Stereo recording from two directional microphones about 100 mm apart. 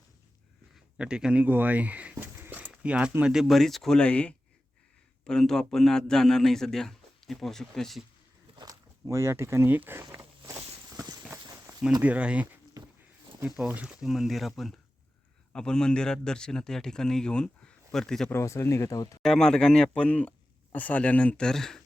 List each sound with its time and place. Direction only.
0.9 s a man's voice: 10° right (ahead or behind)
8.5 s speech: 40° right (ahead or behind); by 10.0 s 20° right (ahead or behind)
10.1 s a sound: 30° right (ahead or behind)
10.9 s clip-clop: 40° right (ahead or behind)
12.0 s speech: 15° right (ahead or behind)
12.8 s walk: 40° right (ahead or behind)
13.6 s a man's voice: 5° right (ahead or behind)
18.3 s speech: 25° left (ahead or behind)
19.2 s a man's voice: 5° left (ahead or behind)